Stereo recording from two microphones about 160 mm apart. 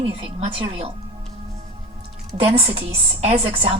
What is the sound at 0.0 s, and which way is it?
Speech, 40° right (ahead or behind).